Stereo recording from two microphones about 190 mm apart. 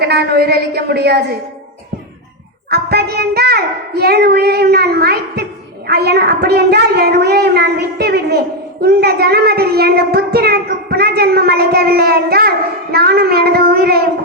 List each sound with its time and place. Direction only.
0.0 s a woman's voice: 55° right (ahead or behind)
2.6 s a woman's voice: 55° right (ahead or behind)